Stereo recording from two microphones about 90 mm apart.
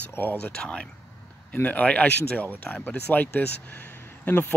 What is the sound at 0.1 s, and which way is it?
Speech, 20° left (ahead or behind).